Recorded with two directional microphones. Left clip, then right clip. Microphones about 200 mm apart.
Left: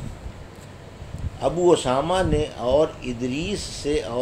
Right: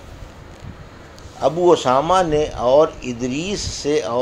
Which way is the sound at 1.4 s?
20° right (ahead or behind).